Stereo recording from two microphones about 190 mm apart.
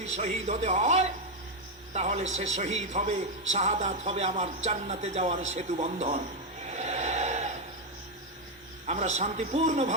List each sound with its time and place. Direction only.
0.0 s a man's voice: 35° right (ahead or behind)
6.7 s snort: 35° right (ahead or behind)
8.9 s a man's voice: 35° right (ahead or behind)